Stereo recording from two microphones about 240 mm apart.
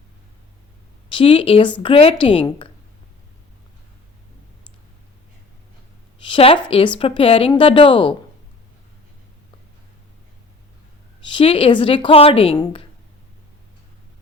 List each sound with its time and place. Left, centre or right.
1.1 s speech: left
6.2 s a sound: left
6.7 s speech: left
11.3 s speech: left